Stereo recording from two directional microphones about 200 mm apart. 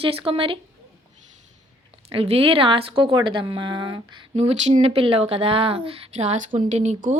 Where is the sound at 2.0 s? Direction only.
30° right (ahead or behind).